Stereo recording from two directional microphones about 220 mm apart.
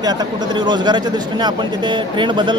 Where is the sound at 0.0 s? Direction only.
20° right (ahead or behind).